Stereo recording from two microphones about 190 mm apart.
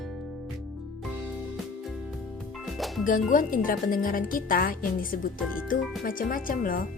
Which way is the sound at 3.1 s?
45° left (ahead or behind).